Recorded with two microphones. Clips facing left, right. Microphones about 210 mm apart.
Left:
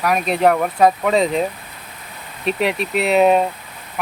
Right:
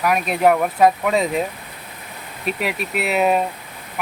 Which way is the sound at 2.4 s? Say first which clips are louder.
Left 4 dB; 5° right (ahead or behind).